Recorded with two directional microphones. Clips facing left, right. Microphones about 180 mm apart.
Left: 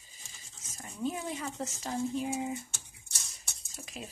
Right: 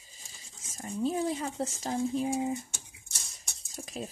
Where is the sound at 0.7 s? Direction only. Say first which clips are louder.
Right 5 dB; 35° right (ahead or behind).